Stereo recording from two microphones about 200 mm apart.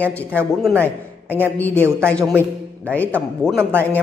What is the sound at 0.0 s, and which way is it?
Speech, 5° left (ahead or behind).